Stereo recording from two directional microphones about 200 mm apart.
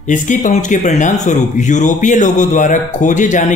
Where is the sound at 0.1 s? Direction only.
40° left (ahead or behind).